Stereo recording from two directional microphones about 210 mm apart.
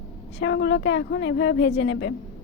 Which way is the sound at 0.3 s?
55° left (ahead or behind).